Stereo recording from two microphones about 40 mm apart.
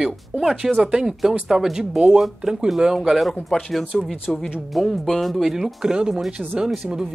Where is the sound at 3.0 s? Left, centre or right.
Centre.